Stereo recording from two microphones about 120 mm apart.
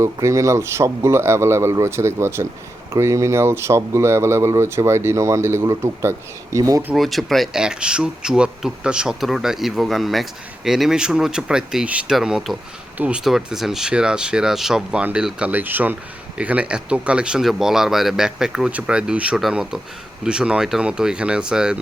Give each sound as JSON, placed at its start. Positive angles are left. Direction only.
{"t": 0.0, "sound": "speech", "side_deg": -25}
{"t": 6.9, "sound": "speech", "side_deg": 0}